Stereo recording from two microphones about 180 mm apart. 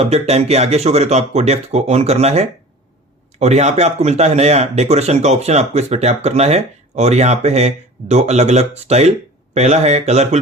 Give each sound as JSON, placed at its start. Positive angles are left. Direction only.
{"t": 0.0, "sound": "speech", "side_deg": -35}